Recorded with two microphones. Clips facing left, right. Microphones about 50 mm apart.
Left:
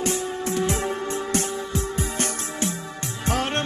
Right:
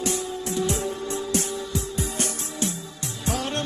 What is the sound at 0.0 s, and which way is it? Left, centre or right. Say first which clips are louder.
Music: left 2 dB; left.